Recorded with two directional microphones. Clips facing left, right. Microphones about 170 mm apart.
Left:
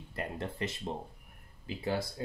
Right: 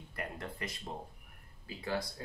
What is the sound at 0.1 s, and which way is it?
Speech, 25° left (ahead or behind).